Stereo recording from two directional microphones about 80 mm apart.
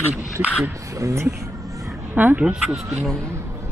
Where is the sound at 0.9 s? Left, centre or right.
Right.